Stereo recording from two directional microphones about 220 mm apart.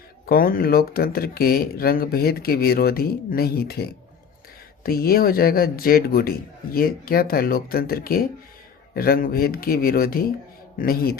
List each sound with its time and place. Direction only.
0.3 s speech: 40° left (ahead or behind)